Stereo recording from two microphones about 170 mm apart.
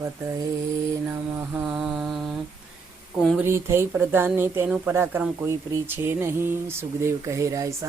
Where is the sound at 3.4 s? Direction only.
15° right (ahead or behind).